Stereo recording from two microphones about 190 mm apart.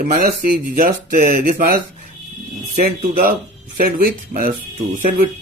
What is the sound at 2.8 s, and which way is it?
Speech, 50° right (ahead or behind).